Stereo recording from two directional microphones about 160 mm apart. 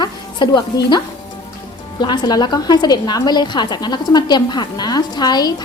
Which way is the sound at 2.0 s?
25° left (ahead or behind).